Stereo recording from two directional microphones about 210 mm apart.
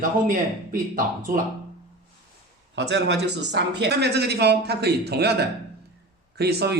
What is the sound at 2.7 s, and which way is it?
Speech, 55° right (ahead or behind).